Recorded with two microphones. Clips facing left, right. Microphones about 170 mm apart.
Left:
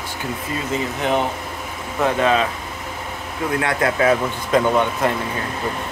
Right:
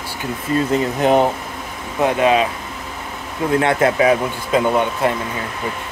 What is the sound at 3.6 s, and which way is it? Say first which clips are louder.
Speech: right 3 dB; 25° right (ahead or behind).